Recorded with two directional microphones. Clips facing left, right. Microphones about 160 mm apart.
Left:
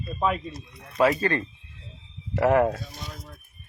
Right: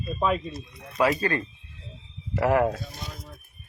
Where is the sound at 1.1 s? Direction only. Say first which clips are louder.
Left 1 dB; 25° left (ahead or behind).